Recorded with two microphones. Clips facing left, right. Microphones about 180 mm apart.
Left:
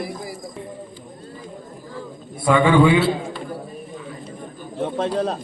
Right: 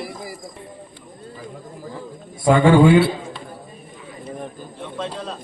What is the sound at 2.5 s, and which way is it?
Speech, 45° right (ahead or behind).